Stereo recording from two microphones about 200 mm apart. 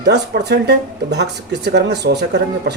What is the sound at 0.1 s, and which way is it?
Speech, 55° right (ahead or behind).